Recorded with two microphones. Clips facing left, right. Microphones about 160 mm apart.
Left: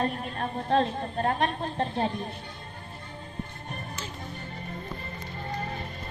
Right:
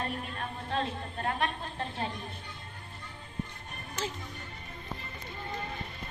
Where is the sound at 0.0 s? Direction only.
40° left (ahead or behind).